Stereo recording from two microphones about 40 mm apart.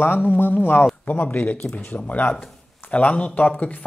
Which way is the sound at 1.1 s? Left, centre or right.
Left.